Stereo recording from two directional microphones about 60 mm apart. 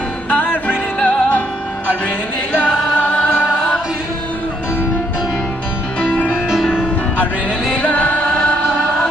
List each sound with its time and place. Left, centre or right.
0.3 s music: left
3.0 s music: left
5.9 s music: left
6.3 s music: centre
7.7 s music: left